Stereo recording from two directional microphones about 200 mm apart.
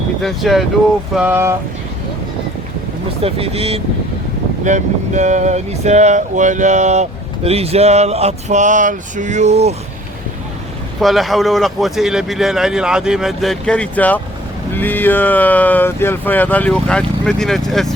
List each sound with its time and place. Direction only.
0.2 s speech: centre (ahead or behind)
3.2 s speech: 30° right (ahead or behind)
4.6 s vehicle: 35° right (ahead or behind)
11.0 s speech: centre (ahead or behind)